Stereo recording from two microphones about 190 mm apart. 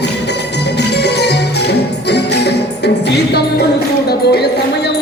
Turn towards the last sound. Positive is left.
turn(degrees=60)  # may be behind; listen again after turning